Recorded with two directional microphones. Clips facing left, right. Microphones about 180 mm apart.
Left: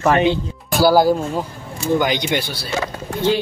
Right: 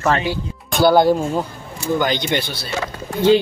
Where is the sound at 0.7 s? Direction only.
5° left (ahead or behind).